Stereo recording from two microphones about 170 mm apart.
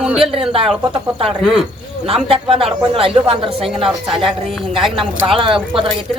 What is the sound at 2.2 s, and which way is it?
Speech, 35° right (ahead or behind).